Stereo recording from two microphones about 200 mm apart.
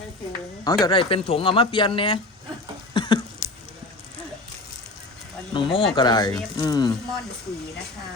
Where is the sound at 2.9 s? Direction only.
25° left (ahead or behind).